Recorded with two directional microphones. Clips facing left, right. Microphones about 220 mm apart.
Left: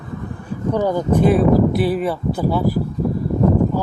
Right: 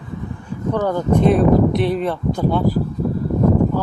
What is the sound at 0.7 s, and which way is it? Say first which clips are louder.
Speech: even; 10° left (ahead or behind).